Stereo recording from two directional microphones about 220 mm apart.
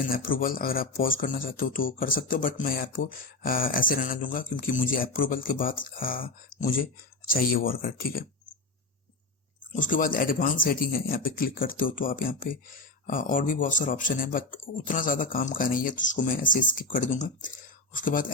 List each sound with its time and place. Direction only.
0.1 s speech: 40° left (ahead or behind)
9.7 s speech: 35° left (ahead or behind)